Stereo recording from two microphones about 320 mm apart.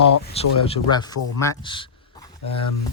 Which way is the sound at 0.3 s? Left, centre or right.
Centre.